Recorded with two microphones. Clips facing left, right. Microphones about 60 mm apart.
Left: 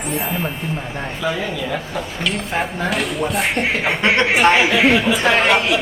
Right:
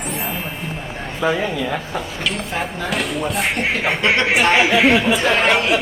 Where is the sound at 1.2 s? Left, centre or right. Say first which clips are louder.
Right 4 dB; right.